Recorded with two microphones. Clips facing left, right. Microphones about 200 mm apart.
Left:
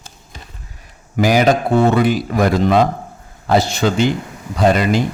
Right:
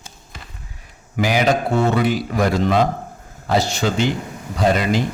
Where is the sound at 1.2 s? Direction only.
45° left (ahead or behind).